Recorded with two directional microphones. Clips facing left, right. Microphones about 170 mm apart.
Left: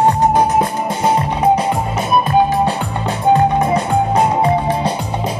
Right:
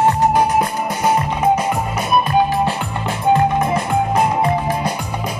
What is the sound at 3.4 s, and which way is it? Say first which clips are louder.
Music: left 2 dB; 25° left (ahead or behind).